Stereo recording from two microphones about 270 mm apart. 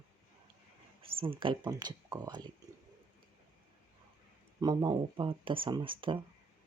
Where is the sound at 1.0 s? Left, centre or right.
Centre.